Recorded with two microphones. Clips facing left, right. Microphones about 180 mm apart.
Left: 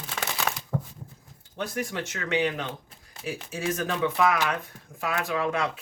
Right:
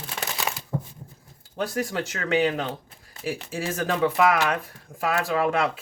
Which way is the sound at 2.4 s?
35° right (ahead or behind).